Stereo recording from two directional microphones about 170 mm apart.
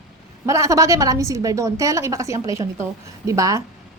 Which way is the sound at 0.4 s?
20° right (ahead or behind).